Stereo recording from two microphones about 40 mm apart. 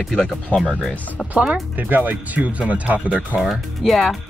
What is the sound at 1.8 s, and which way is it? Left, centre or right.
Speech, right.